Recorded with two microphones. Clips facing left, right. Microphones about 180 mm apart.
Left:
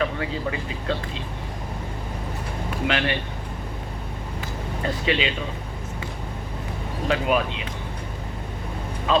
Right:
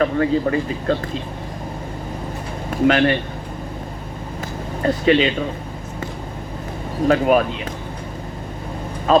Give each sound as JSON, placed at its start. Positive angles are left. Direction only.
{"t": 0.0, "sound": "speech", "side_deg": -45}
{"t": 2.6, "sound": "speech", "side_deg": -45}
{"t": 4.8, "sound": "speech", "side_deg": -45}
{"t": 7.1, "sound": "speech", "side_deg": -45}
{"t": 9.1, "sound": "a sound", "side_deg": -45}